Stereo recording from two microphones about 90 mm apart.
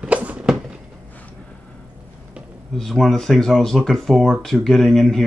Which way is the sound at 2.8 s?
5° left (ahead or behind).